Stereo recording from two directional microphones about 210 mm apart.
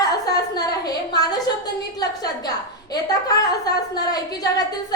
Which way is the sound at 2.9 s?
20° left (ahead or behind).